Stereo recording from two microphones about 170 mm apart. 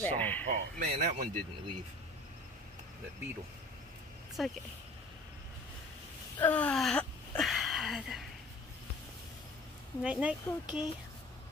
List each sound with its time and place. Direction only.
0.0 s speech: 10° left (ahead or behind)
0.5 s speech: 50° right (ahead or behind)
4.4 s speech: centre (ahead or behind)
6.4 s a sound: 10° left (ahead or behind)
10.0 s speech: 5° right (ahead or behind)